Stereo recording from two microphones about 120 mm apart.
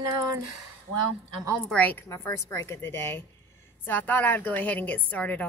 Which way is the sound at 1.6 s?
10° left (ahead or behind).